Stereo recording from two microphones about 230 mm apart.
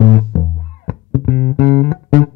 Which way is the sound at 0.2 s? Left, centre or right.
Left.